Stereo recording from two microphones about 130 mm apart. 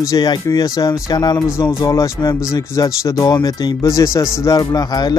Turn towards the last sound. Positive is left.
turn(degrees=30)  # may be behind; listen again after turning